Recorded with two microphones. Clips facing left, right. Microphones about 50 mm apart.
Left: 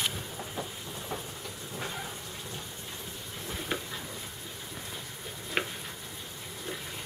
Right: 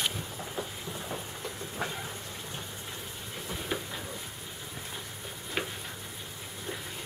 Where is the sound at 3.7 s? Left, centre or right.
Centre.